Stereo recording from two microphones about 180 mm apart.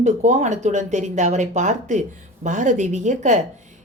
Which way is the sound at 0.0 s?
40° right (ahead or behind).